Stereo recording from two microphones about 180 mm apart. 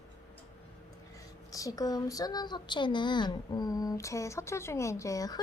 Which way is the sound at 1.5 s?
20° left (ahead or behind).